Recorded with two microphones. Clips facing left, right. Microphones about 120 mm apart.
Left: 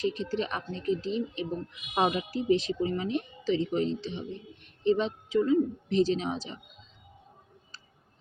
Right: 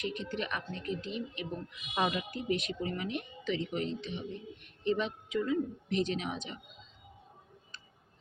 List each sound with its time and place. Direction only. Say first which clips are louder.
0.0 s speech: left 6 dB; 30° left (ahead or behind)